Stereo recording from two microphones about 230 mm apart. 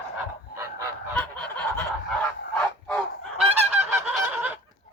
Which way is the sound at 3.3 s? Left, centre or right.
Right.